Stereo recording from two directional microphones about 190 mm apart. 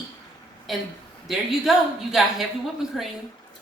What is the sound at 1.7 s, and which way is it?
Speech, centre (ahead or behind).